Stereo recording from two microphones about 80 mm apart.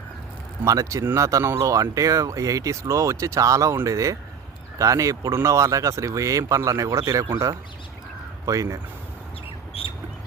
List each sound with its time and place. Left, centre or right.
0.6 s speech: right